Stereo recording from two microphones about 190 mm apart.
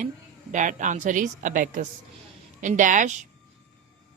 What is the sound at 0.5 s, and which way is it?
A woman's voice, 40° right (ahead or behind).